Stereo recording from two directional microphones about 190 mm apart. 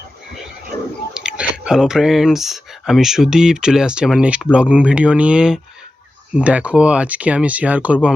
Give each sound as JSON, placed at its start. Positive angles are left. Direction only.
{"t": 1.1, "sound": "speech", "side_deg": -5}